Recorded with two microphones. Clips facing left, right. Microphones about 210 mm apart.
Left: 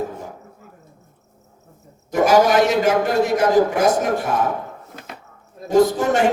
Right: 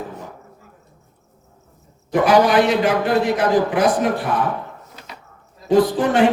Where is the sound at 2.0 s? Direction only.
45° left (ahead or behind).